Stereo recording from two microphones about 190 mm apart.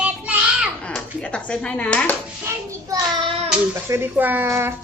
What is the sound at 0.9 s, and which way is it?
Speech, 5° left (ahead or behind).